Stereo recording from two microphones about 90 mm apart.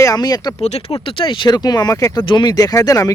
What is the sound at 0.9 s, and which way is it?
Speech, 80° left.